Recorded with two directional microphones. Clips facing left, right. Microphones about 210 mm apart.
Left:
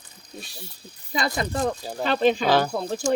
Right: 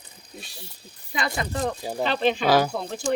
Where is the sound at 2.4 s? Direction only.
10° right (ahead or behind).